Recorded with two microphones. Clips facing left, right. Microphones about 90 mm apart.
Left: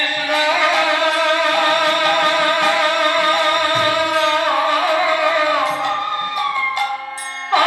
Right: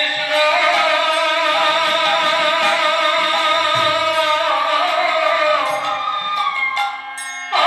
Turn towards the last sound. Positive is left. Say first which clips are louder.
# left 1 dB
turn(degrees=20)  # may be behind; listen again after turning